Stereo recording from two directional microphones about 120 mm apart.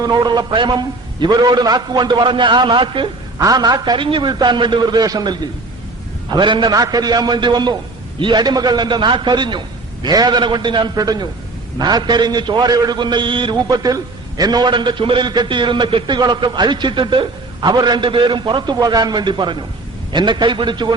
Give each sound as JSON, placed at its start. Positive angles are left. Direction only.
{"t": 0.0, "sound": "a man's voice", "side_deg": -35}
{"t": 3.3, "sound": "a man's voice", "side_deg": -30}